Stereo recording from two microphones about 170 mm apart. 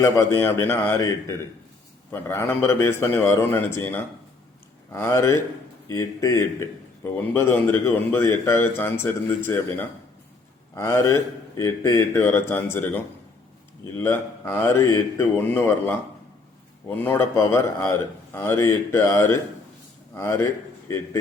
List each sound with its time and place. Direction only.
0.0 s a man's voice: 15° left (ahead or behind)
17.0 s a man's voice: 15° left (ahead or behind)